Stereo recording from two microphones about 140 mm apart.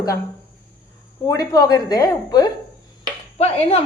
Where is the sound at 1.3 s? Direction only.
25° left (ahead or behind).